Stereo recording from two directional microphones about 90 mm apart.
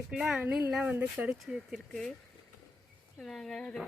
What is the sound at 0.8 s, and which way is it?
Speech, 15° right (ahead or behind).